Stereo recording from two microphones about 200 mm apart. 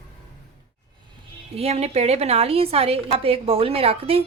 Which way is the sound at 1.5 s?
30° right (ahead or behind).